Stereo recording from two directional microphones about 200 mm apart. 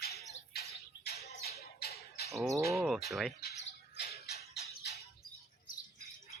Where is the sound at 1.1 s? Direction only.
35° left (ahead or behind).